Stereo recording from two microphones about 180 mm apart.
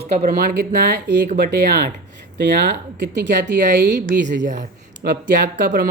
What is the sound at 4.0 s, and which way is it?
A woman's voice, 50° right (ahead or behind).